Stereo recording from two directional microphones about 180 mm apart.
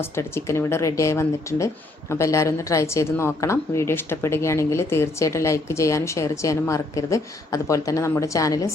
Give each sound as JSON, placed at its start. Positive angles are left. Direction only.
{"t": 0.0, "sound": "speech", "side_deg": 15}